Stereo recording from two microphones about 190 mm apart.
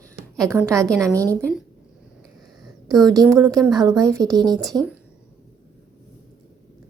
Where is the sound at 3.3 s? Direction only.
15° right (ahead or behind).